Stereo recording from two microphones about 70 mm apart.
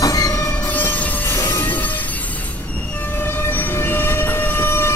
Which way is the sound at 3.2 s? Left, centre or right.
Left.